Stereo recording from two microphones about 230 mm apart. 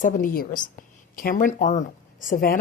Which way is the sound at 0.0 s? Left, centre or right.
Left.